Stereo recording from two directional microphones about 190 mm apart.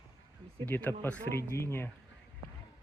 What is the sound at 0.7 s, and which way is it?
Speech, 10° left (ahead or behind).